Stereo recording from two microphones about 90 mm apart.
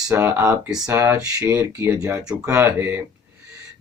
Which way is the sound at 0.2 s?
30° right (ahead or behind).